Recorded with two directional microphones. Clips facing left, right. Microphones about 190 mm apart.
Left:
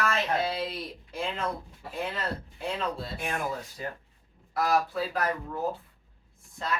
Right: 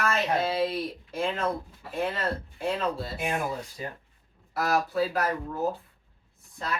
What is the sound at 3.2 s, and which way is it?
Speech, 15° right (ahead or behind).